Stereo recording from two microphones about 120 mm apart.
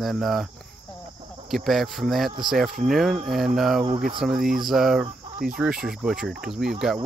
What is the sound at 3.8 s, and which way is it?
Speech, 45° right (ahead or behind).